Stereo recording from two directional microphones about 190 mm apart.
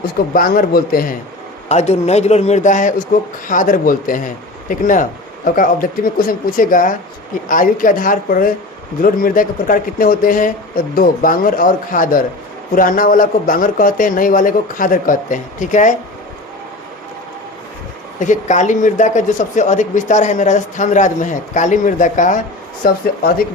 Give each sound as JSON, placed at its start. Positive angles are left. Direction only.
{"t": 0.3, "sound": "a man's voice", "side_deg": 50}
{"t": 1.6, "sound": "a man's voice", "side_deg": 35}
{"t": 18.2, "sound": "a man's voice", "side_deg": 40}